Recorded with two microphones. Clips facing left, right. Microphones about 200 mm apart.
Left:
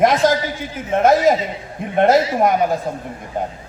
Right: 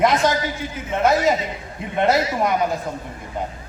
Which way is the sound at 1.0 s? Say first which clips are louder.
Left 4 dB; 50° left (ahead or behind).